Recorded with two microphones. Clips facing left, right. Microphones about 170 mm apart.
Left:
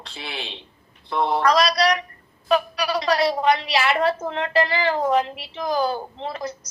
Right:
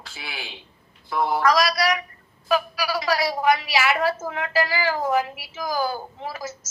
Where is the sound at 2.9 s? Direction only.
25° left (ahead or behind).